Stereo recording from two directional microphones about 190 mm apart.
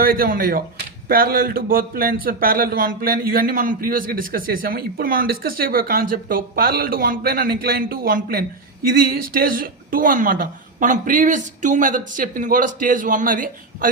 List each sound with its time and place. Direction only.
0.0 s a man's voice: 50° right (ahead or behind)